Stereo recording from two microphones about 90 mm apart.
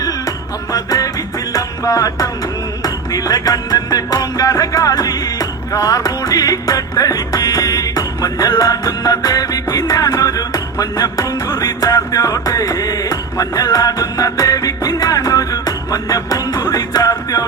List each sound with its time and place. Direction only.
0.7 s music: 40° left (ahead or behind)